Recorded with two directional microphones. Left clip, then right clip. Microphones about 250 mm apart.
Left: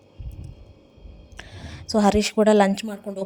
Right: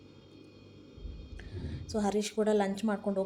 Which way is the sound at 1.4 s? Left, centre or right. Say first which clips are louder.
Left 7 dB; left.